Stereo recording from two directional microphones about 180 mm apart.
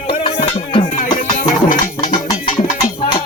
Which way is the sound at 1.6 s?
50° left (ahead or behind).